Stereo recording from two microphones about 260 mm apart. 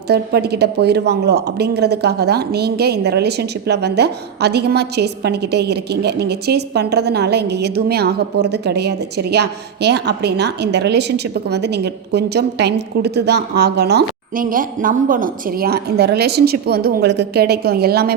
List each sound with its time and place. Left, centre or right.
0.1 s speech: right